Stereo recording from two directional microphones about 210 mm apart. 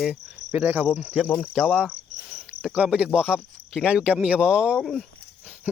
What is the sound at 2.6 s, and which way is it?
Speech, 5° right (ahead or behind).